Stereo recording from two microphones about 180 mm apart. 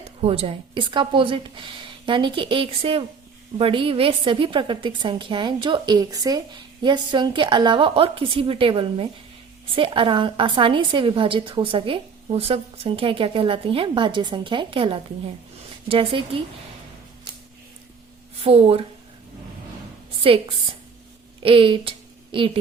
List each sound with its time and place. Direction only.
0.2 s a woman's voice: 35° right (ahead or behind)
18.4 s speech: 35° right (ahead or behind)
20.2 s a woman's voice: 30° right (ahead or behind)